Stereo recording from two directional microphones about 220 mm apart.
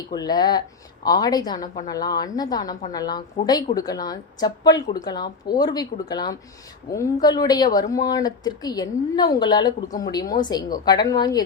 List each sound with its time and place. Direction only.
0.1 s speech: 20° left (ahead or behind)